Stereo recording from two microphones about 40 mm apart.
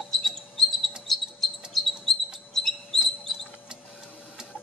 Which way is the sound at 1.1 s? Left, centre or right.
Centre.